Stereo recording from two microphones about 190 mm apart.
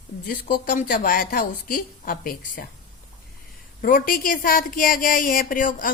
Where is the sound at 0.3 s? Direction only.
50° left (ahead or behind).